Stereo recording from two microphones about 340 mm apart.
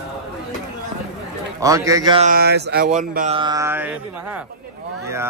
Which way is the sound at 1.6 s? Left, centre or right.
Centre.